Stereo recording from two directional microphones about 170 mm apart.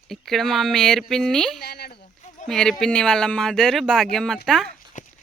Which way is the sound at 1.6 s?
70° left (ahead or behind).